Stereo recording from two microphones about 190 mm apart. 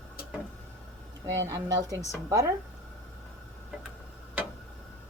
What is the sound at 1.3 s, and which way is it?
Speech, 15° right (ahead or behind).